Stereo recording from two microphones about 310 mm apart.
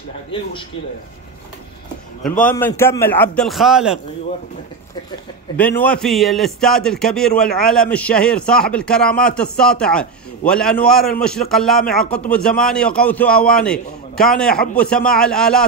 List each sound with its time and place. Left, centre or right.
0.3 s speech: centre
2.4 s a man's voice: centre
5.6 s a man's voice: centre